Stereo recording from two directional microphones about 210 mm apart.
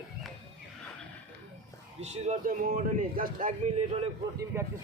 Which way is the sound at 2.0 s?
30° right (ahead or behind).